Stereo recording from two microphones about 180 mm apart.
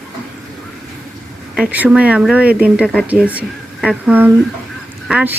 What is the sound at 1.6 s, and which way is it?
Speech, 5° right (ahead or behind).